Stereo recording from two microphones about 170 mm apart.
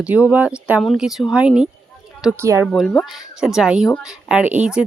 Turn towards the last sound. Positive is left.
turn(degrees=-5)  # may be behind; listen again after turning